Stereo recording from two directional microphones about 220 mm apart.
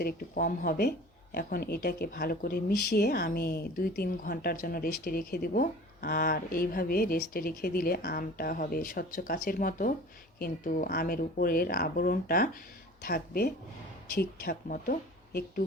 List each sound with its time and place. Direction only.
0.0 s speech: 40° left (ahead or behind)